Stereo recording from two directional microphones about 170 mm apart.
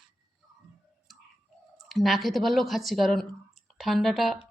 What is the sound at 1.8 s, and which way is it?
Speech, centre (ahead or behind).